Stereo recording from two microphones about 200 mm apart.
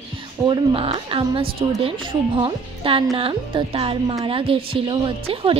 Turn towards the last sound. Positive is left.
turn(degrees=-25)  # may be behind; listen again after turning